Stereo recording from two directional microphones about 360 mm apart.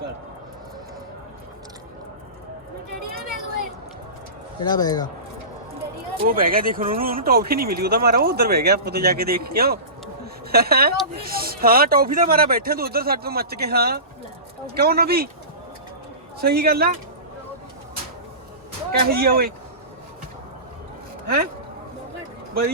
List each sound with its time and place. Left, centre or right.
3.2 s a sound: right
4.6 s speech: centre
6.1 s speech: right
16.4 s speech: right
18.9 s speech: right